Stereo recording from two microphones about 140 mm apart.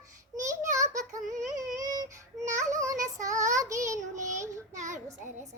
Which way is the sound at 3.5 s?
20° right (ahead or behind).